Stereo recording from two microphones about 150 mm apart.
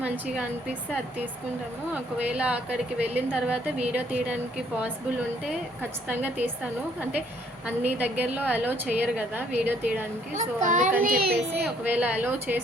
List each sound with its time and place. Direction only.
0.0 s a woman's voice: 10° right (ahead or behind)
1.9 s a woman's voice: 10° right (ahead or behind)
6.1 s a woman's voice: 10° right (ahead or behind)
7.9 s a woman's voice: 10° right (ahead or behind)
10.3 s a child's voice: 55° right (ahead or behind)
11.0 s a child's voice: 80° right
11.9 s a woman's voice: 10° right (ahead or behind)